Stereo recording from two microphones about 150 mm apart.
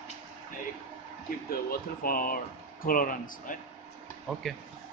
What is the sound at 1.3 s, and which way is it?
Speech, 65° left (ahead or behind).